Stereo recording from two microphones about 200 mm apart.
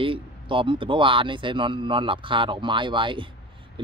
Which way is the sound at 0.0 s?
25° right (ahead or behind).